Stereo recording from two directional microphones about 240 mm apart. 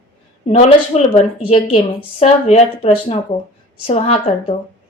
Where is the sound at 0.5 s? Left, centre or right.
Left.